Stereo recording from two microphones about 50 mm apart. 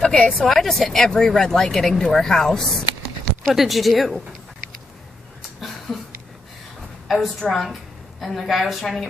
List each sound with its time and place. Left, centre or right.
0.0 s a woman's voice: left
0.5 s a woman's voice: centre
5.9 s a sound: centre
7.1 s a woman's voice: centre